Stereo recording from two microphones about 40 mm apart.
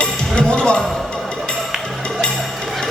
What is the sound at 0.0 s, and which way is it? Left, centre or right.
Music, left.